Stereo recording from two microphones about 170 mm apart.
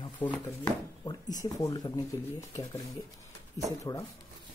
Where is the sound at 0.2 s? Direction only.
5° left (ahead or behind).